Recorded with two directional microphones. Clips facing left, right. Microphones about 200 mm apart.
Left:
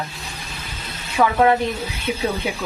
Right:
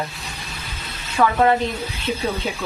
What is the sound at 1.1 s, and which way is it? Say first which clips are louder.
Speech: left 1 dB; 15° left (ahead or behind).